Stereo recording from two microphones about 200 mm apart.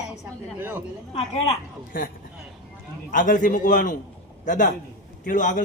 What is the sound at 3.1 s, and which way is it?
Speech, 40° left (ahead or behind).